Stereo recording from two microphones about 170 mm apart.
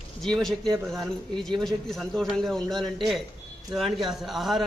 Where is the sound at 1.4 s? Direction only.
Centre (ahead or behind).